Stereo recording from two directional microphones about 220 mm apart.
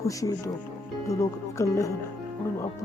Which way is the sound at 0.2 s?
15° left (ahead or behind).